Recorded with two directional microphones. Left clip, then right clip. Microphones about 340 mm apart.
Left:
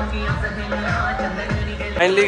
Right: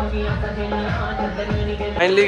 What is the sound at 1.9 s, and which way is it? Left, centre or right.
Speech, centre.